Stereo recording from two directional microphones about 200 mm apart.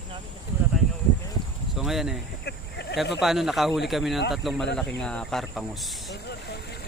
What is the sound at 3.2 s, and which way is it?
A man's voice, centre (ahead or behind).